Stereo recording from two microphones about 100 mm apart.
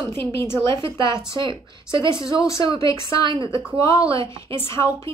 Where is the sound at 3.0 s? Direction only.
55° right (ahead or behind).